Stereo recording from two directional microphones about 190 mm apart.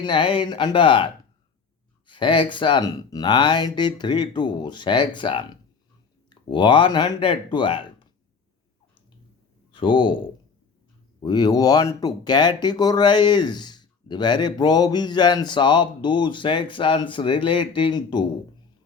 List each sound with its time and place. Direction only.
0.0 s speech: 25° left (ahead or behind)
9.7 s speech: 25° left (ahead or behind)
11.2 s speech: 20° left (ahead or behind)